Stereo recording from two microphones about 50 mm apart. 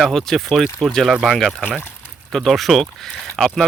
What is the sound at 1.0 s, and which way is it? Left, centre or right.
Speech, centre.